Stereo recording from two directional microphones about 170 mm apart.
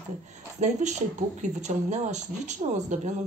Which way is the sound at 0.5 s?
45° right (ahead or behind).